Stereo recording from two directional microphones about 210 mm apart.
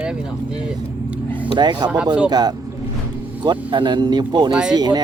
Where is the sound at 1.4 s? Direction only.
20° right (ahead or behind).